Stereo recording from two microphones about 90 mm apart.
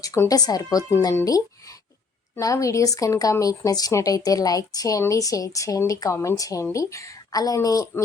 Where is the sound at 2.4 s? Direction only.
35° left (ahead or behind).